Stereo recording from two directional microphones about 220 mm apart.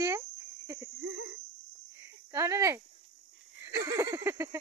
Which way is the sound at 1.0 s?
60° right (ahead or behind).